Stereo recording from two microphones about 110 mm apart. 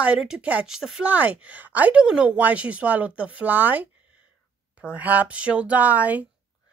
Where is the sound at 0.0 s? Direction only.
10° right (ahead or behind).